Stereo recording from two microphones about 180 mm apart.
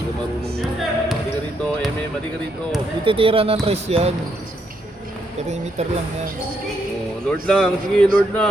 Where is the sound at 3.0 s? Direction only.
30° right (ahead or behind).